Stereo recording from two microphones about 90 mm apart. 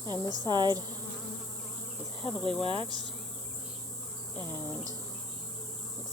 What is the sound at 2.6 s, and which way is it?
Speech, 75° right (ahead or behind).